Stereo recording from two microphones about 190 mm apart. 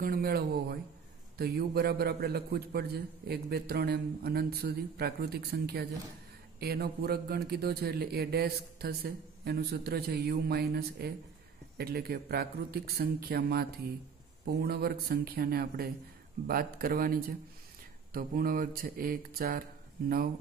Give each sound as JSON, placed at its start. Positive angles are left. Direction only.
{"t": 0.0, "sound": "a man's voice", "side_deg": -50}